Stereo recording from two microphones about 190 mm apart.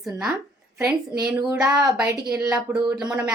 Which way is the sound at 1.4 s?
20° right (ahead or behind).